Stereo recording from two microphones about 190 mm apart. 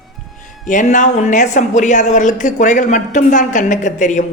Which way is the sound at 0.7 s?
40° left (ahead or behind).